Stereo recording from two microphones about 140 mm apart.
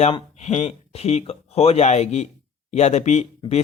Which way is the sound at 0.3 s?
55° left (ahead or behind).